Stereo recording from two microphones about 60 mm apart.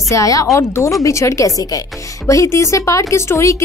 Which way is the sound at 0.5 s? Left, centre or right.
Left.